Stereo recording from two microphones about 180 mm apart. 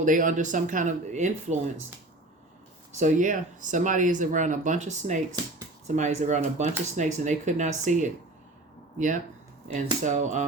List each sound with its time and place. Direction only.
0.0 s speech: 45° right (ahead or behind)
3.0 s speech: 45° right (ahead or behind)
9.7 s speech: 45° right (ahead or behind)